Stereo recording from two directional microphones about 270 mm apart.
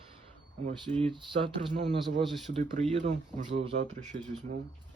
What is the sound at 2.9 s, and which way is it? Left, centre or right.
Speech, right.